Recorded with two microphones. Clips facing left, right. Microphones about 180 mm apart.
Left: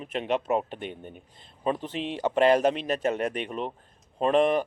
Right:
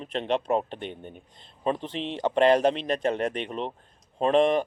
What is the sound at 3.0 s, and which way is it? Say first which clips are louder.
Speech: right 1 dB; 35° right (ahead or behind).